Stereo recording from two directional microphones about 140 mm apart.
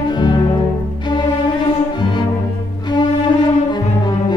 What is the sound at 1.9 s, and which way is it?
Music, 30° left (ahead or behind).